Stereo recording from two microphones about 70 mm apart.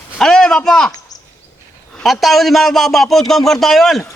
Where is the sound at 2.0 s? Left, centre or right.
Centre.